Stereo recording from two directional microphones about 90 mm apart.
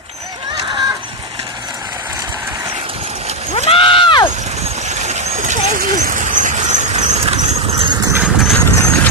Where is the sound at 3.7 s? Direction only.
80° left.